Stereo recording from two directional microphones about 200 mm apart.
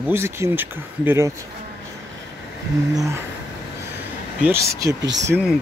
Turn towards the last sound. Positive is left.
turn(degrees=-10)  # may be behind; listen again after turning